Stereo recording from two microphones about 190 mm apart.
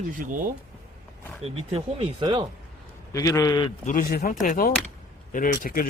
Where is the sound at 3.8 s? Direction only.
45° left (ahead or behind).